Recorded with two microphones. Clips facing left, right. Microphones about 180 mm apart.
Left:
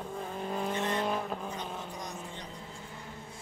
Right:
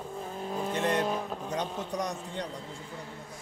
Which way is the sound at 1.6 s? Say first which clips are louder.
Right 7 dB; 70° right (ahead or behind).